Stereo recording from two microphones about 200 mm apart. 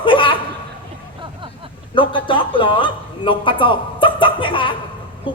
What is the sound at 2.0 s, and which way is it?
A man's voice, 25° left (ahead or behind).